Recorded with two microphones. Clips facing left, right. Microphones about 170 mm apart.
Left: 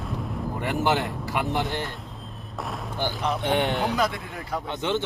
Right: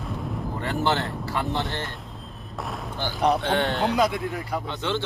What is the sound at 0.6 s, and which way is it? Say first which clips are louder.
Speech: left 1 dB; 15° left (ahead or behind).